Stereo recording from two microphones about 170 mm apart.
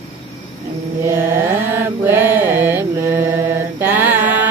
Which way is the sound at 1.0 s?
15° right (ahead or behind).